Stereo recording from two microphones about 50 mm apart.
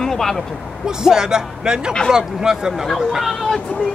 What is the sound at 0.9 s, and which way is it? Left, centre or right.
Speech, centre.